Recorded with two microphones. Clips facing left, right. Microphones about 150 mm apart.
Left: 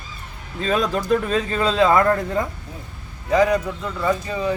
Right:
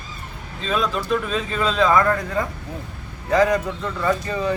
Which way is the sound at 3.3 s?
10° left (ahead or behind).